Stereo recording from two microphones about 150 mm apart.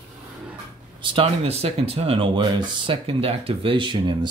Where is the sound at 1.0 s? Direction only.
35° right (ahead or behind).